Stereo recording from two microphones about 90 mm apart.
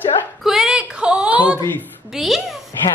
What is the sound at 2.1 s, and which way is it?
Speech, centre (ahead or behind).